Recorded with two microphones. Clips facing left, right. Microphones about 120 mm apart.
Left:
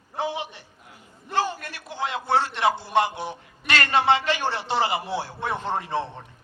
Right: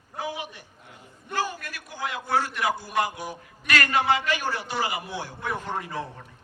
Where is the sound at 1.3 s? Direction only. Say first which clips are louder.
Left 4 dB; 25° left (ahead or behind).